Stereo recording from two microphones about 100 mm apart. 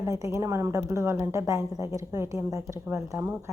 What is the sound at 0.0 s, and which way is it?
A woman's voice, 30° right (ahead or behind).